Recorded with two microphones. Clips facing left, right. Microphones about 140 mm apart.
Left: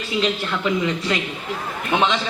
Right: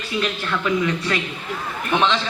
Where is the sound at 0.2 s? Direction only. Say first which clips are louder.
Left 1 dB; 20° left (ahead or behind).